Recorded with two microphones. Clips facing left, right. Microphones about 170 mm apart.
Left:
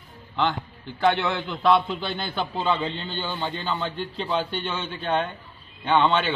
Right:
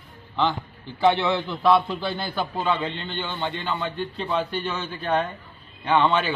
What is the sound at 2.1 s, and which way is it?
Speech, 25° left (ahead or behind).